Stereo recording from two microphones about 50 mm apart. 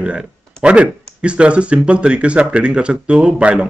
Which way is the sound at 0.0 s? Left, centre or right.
Right.